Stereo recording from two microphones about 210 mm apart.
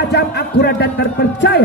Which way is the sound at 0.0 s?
50° left (ahead or behind).